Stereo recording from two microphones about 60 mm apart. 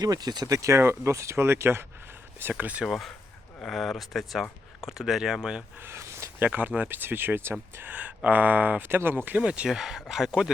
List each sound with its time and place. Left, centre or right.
0.0 s speech: right
0.8 s speech: right
2.5 s speech: right
2.8 s speech: centre
5.8 s a sound: right
6.4 s speech: right
9.6 s speech: centre